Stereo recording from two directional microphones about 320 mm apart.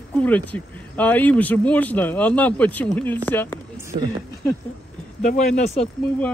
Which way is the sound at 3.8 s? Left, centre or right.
Centre.